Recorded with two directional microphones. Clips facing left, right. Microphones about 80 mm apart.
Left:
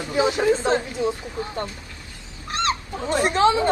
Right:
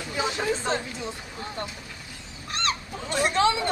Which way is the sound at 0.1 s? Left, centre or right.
Centre.